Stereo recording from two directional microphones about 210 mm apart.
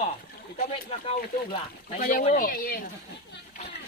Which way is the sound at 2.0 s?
40° left (ahead or behind).